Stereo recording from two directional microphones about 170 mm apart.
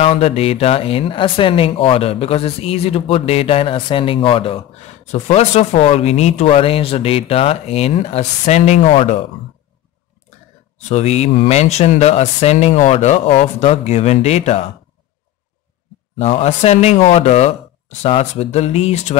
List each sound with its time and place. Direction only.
0.0 s speech: 35° left (ahead or behind)
10.9 s speech: 40° left (ahead or behind)
16.2 s speech: 35° left (ahead or behind)